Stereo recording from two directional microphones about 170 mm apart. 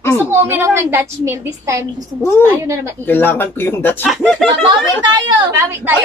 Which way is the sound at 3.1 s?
10° left (ahead or behind).